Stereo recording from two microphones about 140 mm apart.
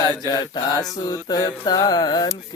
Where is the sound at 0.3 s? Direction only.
30° left (ahead or behind).